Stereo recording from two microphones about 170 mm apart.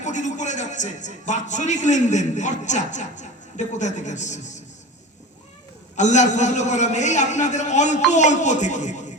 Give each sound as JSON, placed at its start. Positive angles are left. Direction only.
{"t": 0.0, "sound": "a man's voice", "side_deg": 45}
{"t": 6.0, "sound": "a man's voice", "side_deg": 45}